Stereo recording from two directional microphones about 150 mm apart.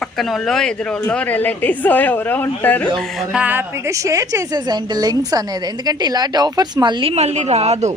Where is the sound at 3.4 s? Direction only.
15° right (ahead or behind).